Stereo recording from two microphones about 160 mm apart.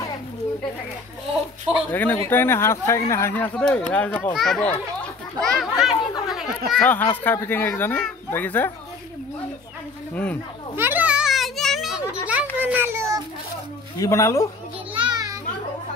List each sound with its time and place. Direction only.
1.9 s a child's voice: 10° left (ahead or behind)
5.4 s children playing: centre (ahead or behind)
6.7 s speech: 10° left (ahead or behind)
10.1 s speech: 10° left (ahead or behind)
10.8 s children playing: 10° right (ahead or behind)
12.3 s a sound: 10° right (ahead or behind)
13.9 s speech: 20° left (ahead or behind)
15.0 s children playing: 25° right (ahead or behind)